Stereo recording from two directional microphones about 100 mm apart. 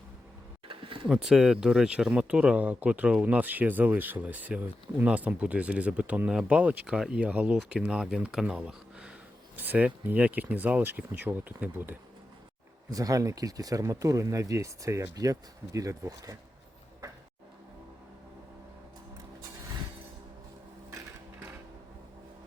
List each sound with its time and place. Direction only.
0.7 s a sound: 60° right (ahead or behind)
1.0 s speech: 5° right (ahead or behind)
12.9 s speech: 35° right (ahead or behind)